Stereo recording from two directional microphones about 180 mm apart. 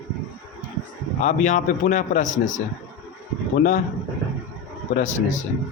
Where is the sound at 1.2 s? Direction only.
40° left (ahead or behind).